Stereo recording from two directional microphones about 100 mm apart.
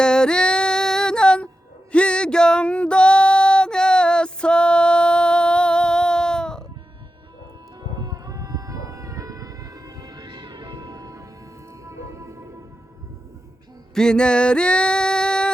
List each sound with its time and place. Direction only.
0.0 s female singing: 10° left (ahead or behind)
1.9 s music: 10° left (ahead or behind)
7.8 s music: 40° right (ahead or behind)
13.9 s female singing: 5° left (ahead or behind)